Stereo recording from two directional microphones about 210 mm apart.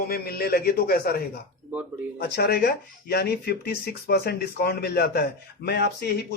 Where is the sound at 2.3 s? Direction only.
50° left (ahead or behind).